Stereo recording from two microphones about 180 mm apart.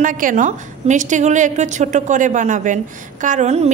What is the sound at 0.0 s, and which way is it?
A woman's voice, 45° right (ahead or behind).